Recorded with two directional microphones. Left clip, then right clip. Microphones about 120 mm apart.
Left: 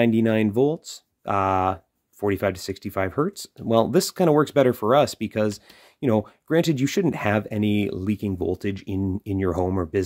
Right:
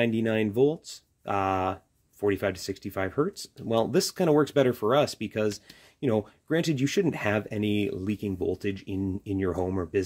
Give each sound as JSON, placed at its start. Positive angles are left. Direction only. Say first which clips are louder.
{"t": 0.0, "sound": "speech", "louder": "left 5 dB", "side_deg": 35}